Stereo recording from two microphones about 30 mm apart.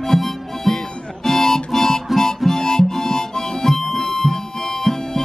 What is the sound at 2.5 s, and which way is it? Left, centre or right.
Harmonica, centre.